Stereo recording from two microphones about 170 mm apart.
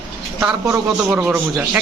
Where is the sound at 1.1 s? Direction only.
5° right (ahead or behind).